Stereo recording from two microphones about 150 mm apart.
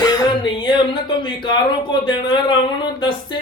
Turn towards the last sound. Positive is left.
turn(degrees=30)  # may be behind; listen again after turning